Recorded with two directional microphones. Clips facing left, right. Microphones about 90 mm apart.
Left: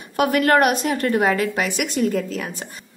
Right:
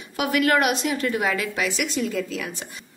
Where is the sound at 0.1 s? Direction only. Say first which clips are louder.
Left 4 dB; 45° left (ahead or behind).